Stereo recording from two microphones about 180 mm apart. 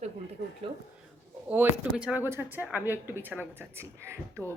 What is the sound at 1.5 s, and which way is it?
Speech, 5° right (ahead or behind).